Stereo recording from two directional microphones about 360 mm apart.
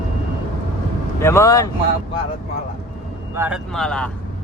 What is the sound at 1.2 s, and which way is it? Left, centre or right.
Speech, centre.